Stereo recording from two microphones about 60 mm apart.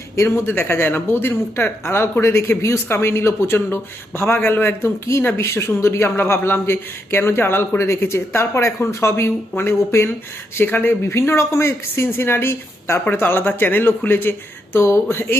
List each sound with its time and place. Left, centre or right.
0.4 s speech: left
7.8 s speech: left